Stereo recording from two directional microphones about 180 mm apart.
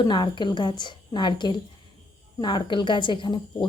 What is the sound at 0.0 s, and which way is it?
A woman's voice, 25° left (ahead or behind).